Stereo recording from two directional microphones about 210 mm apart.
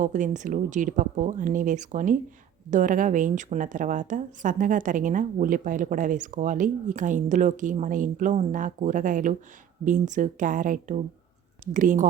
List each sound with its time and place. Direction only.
0.0 s speech: 35° right (ahead or behind)